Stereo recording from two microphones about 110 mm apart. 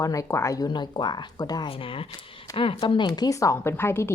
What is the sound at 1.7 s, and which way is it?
A woman's voice, 55° left (ahead or behind).